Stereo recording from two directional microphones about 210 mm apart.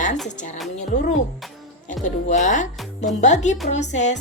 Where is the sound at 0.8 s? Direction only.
35° left (ahead or behind).